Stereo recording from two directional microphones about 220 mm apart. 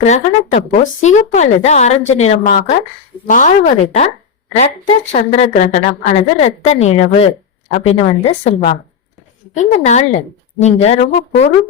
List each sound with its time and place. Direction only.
0.0 s a woman's voice: 30° left (ahead or behind)
5.1 s a woman's voice: 35° left (ahead or behind)